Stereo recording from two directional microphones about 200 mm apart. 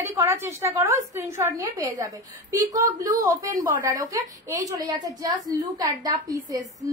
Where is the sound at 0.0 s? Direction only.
15° right (ahead or behind).